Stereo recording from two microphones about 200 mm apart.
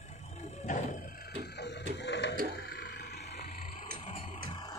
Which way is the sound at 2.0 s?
60° left (ahead or behind).